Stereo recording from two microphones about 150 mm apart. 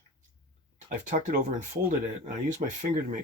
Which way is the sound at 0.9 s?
60° right (ahead or behind).